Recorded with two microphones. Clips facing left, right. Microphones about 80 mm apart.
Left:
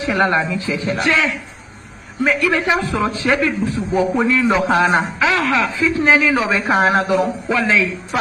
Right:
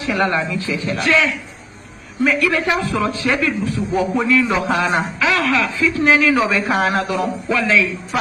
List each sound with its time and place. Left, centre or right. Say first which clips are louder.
0.0 s a man's voice: left 2 dB; left